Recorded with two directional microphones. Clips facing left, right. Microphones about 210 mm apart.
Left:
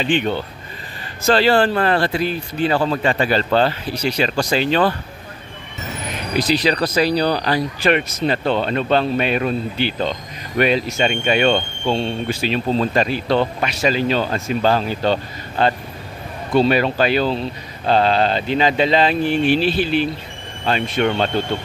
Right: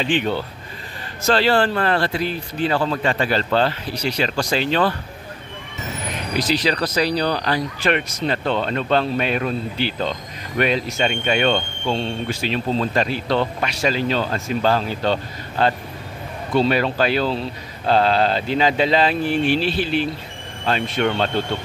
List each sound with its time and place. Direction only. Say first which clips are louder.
0.0 s speech: left 2 dB; centre (ahead or behind)
1.2 s speech: left 2 dB; 10° left (ahead or behind)
6.5 s speech: left 3 dB; 15° left (ahead or behind)
10.6 s speech: left 3 dB; 5° left (ahead or behind)